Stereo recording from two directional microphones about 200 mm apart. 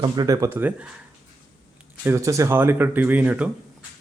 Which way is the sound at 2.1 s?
15° right (ahead or behind).